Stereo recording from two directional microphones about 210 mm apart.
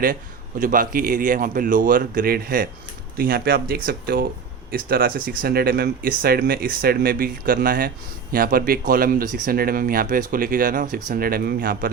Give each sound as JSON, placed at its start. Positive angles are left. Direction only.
{"t": 0.6, "sound": "speech", "side_deg": -40}